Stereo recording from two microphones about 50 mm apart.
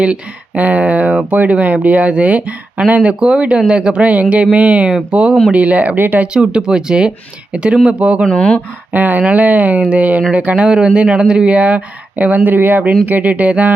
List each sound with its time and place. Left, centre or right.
0.0 s speech: right
6.3 s speech: centre
8.3 s speech: left
8.9 s speech: right